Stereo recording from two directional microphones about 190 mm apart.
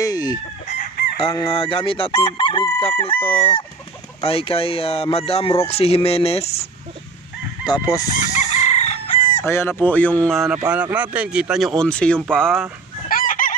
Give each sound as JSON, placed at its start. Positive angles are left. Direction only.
{"t": 0.0, "sound": "chicken", "side_deg": 20}
{"t": 0.7, "sound": "chicken", "side_deg": 50}
{"t": 1.5, "sound": "crowing", "side_deg": 30}
{"t": 4.2, "sound": "speech", "side_deg": 30}
{"t": 7.6, "sound": "crowing", "side_deg": 20}
{"t": 8.2, "sound": "crowing", "side_deg": 40}
{"t": 9.4, "sound": "goose", "side_deg": 10}
{"t": 10.7, "sound": "speech", "side_deg": -10}
{"t": 13.1, "sound": "chicken", "side_deg": 45}